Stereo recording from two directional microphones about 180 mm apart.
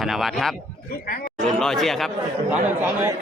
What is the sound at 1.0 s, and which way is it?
Speech, 55° left (ahead or behind).